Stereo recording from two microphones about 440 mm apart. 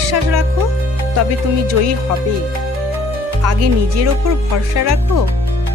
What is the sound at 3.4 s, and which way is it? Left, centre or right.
Speech, right.